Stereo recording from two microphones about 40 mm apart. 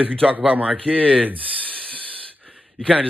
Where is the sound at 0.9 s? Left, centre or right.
Right.